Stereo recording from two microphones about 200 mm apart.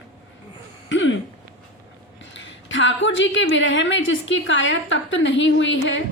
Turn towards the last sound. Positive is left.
turn(degrees=65)  # may be behind; listen again after turning